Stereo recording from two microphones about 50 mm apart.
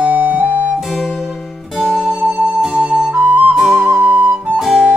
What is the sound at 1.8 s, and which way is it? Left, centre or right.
Music, left.